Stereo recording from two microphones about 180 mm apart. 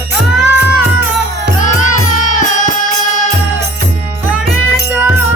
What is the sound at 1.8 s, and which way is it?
Music, 45° left (ahead or behind).